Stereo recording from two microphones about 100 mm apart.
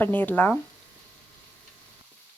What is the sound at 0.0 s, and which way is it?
Speech, 20° left (ahead or behind).